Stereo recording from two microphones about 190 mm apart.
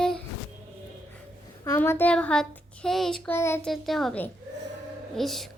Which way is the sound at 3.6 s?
Centre (ahead or behind).